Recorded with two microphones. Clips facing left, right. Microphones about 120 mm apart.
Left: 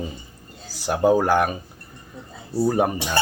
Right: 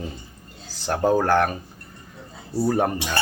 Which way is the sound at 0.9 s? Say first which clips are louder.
Left 2 dB; 10° left (ahead or behind).